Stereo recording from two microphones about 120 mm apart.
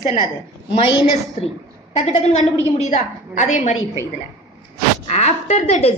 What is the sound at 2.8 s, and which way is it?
A woman's voice, 90° left.